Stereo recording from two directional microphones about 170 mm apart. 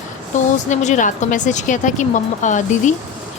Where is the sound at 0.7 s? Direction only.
45° left (ahead or behind).